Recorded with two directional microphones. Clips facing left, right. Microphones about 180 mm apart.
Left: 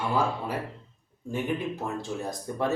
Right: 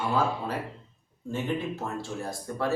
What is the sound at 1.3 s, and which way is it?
A man's voice, 15° left (ahead or behind).